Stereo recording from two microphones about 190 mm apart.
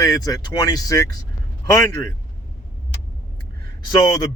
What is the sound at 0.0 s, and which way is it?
A man's voice, 20° left (ahead or behind).